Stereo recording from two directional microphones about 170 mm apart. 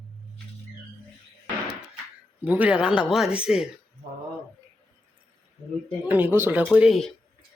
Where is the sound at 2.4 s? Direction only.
10° right (ahead or behind).